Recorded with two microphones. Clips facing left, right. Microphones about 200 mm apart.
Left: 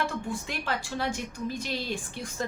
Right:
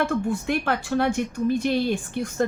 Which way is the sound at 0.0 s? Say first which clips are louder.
Right 8 dB; 60° right (ahead or behind).